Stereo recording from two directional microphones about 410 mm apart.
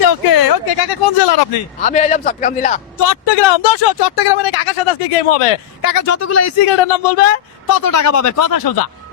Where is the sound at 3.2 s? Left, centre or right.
Left.